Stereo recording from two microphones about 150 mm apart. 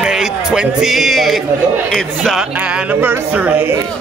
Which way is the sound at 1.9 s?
5° left (ahead or behind).